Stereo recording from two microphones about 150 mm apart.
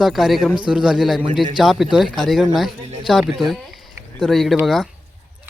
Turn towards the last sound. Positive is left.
turn(degrees=0)  # may be behind; listen again after turning